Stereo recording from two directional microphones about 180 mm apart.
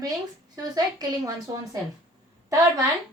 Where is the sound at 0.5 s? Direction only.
20° right (ahead or behind).